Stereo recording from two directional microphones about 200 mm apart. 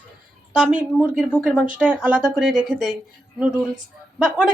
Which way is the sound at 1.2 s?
5° left (ahead or behind).